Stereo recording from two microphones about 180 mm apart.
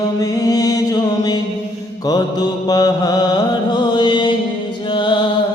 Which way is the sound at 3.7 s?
25° left (ahead or behind).